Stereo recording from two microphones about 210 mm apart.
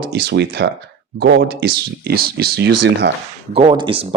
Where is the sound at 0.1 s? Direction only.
50° right (ahead or behind).